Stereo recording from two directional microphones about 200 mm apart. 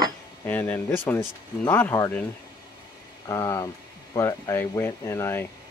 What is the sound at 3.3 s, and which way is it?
Speech, 15° left (ahead or behind).